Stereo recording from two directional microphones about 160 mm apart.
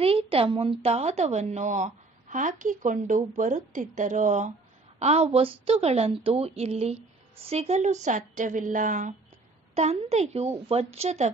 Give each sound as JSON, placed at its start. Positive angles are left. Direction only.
{"t": 0.0, "sound": "a woman's voice", "side_deg": -35}
{"t": 9.8, "sound": "a woman's voice", "side_deg": -40}